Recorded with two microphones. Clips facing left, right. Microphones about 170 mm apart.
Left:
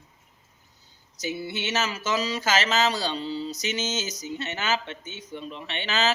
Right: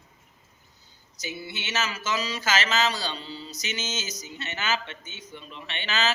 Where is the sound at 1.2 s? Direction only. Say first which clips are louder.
Left 6 dB; 40° left (ahead or behind).